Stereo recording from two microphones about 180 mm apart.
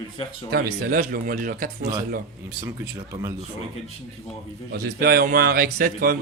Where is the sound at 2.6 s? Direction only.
20° right (ahead or behind).